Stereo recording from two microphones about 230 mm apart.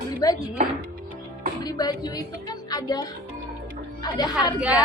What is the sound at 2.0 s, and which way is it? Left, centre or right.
A woman's voice, centre.